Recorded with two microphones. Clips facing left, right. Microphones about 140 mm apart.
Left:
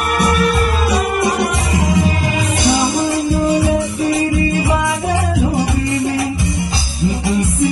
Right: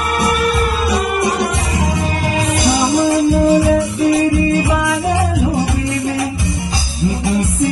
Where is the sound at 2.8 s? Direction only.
20° right (ahead or behind).